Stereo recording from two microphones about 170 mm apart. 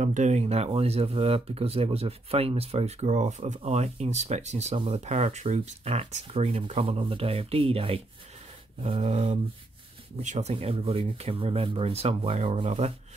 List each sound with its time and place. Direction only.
0.0 s speech: 45° right (ahead or behind)